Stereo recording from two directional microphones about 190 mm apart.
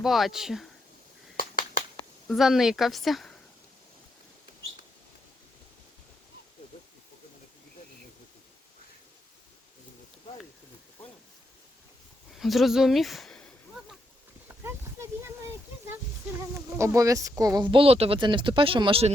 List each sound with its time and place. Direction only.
0.0 s speech: centre (ahead or behind)
1.4 s a sound: 50° left (ahead or behind)
2.2 s speech: centre (ahead or behind)
12.4 s a sound: centre (ahead or behind)
14.4 s clip-clop: 15° right (ahead or behind)
16.6 s speech: 15° right (ahead or behind)